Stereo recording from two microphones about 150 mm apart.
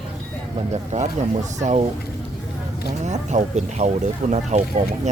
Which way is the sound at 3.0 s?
50° right (ahead or behind).